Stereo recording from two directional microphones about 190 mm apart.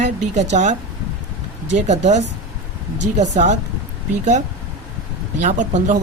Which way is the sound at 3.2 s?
40° right (ahead or behind).